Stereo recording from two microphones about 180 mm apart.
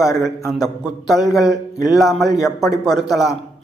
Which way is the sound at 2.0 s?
Centre (ahead or behind).